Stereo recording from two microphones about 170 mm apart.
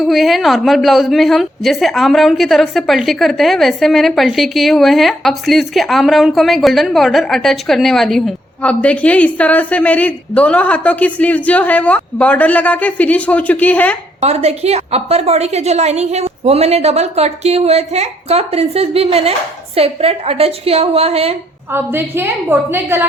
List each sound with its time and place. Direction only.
0.0 s a woman's voice: centre (ahead or behind)
14.2 s a woman's voice: 40° right (ahead or behind)
21.7 s a woman's voice: 15° right (ahead or behind)